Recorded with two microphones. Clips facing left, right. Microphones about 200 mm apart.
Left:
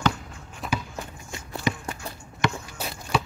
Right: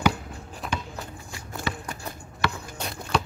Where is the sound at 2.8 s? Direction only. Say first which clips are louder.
Even; 5° left (ahead or behind).